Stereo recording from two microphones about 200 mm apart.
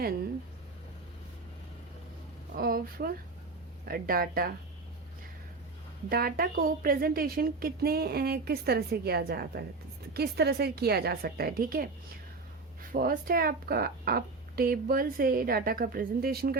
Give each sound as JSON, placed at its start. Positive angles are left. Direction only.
{"t": 2.6, "sound": "a woman's voice", "side_deg": -50}
{"t": 6.1, "sound": "a woman's voice", "side_deg": -45}